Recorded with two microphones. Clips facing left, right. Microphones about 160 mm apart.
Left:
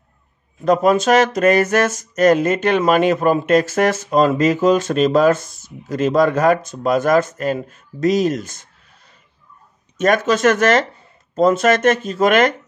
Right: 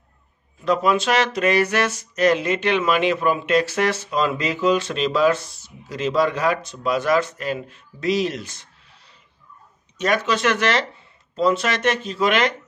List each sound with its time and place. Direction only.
0.7 s speech: 45° left (ahead or behind)